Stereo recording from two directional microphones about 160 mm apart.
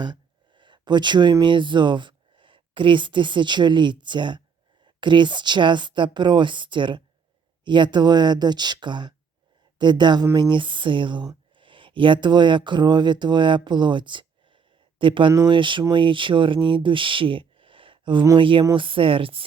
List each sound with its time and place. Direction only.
0.0 s speech: 30° right (ahead or behind)
15.3 s speech: 20° right (ahead or behind)
15.5 s speech: 30° right (ahead or behind)